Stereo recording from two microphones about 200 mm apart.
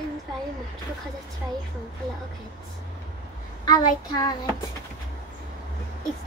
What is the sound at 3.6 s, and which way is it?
Speech, 20° left (ahead or behind).